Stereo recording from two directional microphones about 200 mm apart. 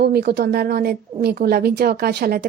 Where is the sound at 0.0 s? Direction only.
55° right (ahead or behind).